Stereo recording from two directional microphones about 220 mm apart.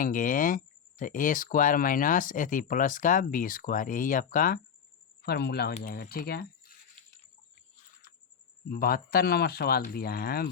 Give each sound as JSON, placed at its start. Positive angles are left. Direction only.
{"t": 0.0, "sound": "speech", "side_deg": 35}
{"t": 8.7, "sound": "speech", "side_deg": 40}